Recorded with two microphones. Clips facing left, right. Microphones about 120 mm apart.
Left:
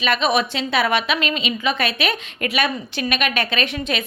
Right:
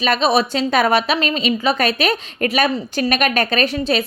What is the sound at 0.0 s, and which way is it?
A woman's voice, 35° right (ahead or behind).